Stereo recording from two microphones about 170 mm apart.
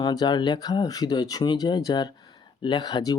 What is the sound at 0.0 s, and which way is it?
Speech, 25° left (ahead or behind).